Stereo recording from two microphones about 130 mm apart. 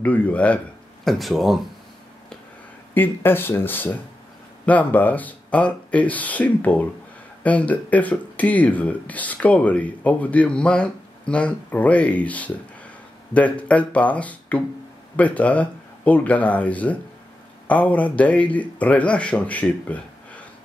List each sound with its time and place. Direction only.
0.0 s speech: 10° left (ahead or behind)
2.9 s speech: 15° left (ahead or behind)